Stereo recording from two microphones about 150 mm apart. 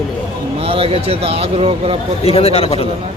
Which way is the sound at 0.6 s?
40° right (ahead or behind).